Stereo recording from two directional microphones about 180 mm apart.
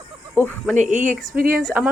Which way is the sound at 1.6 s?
5° right (ahead or behind).